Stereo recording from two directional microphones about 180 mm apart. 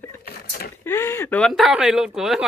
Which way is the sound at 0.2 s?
55° left (ahead or behind).